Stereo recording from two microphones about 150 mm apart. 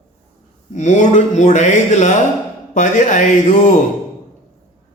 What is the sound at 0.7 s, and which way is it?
Speech, 50° left (ahead or behind).